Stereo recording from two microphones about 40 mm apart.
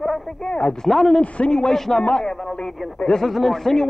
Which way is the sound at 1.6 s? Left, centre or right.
Centre.